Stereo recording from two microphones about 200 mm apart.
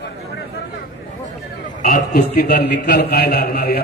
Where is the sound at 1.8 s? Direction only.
50° left (ahead or behind).